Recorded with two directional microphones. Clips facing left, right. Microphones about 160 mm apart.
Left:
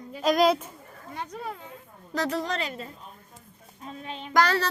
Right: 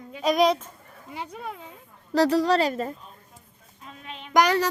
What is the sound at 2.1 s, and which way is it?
Speech, 35° right (ahead or behind).